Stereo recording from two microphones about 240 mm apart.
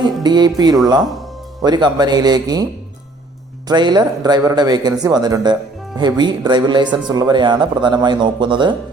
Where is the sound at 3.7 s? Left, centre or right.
Centre.